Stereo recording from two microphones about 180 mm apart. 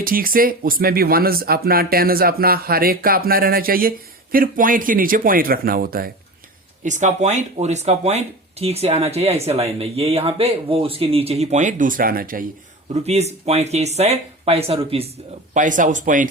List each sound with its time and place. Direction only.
0.0 s speech: 50° right (ahead or behind)
6.8 s speech: 40° right (ahead or behind)
12.9 s speech: 35° right (ahead or behind)
15.5 s speech: 45° right (ahead or behind)